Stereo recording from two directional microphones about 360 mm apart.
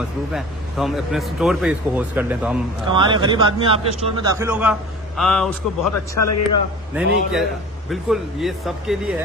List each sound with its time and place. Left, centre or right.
0.3 s speech: centre
6.1 s a man's voice: left
6.9 s speech: centre